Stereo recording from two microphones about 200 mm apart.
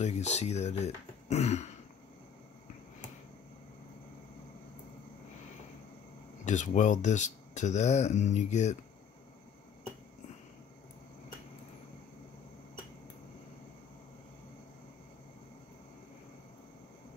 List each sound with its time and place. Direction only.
0.0 s speech: 35° left (ahead or behind)
6.4 s speech: 40° left (ahead or behind)